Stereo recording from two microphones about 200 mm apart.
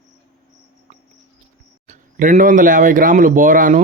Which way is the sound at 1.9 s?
40° right (ahead or behind).